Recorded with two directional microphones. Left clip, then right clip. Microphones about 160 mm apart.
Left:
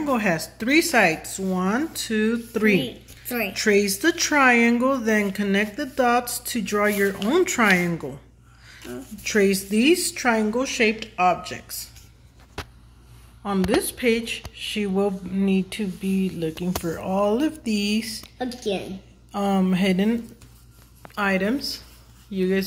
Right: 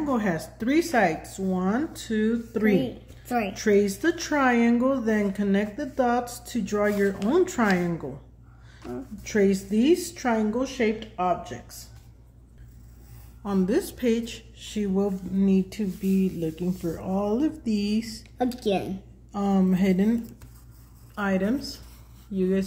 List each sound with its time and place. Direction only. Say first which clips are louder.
0.0 s speech: left 4 dB; 20° left (ahead or behind)
3.3 s a woman's voice: even; 35° right (ahead or behind)
3.5 s speech: left 3 dB; 15° left (ahead or behind)
9.2 s speech: left 3 dB; 15° left (ahead or behind)
13.4 s speech: left 3 dB; 10° left (ahead or behind)
18.4 s a woman's voice: right 2 dB; 85° right
19.3 s speech: left 3 dB; 5° left (ahead or behind)